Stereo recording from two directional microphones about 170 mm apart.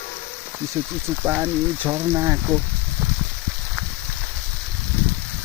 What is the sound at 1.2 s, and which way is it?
Speech, 10° right (ahead or behind).